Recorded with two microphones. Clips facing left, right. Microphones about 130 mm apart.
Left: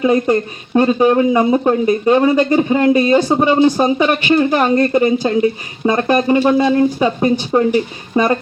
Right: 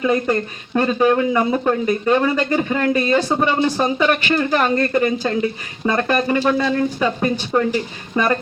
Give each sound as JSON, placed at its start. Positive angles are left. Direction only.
{"t": 0.0, "sound": "speech", "side_deg": 20}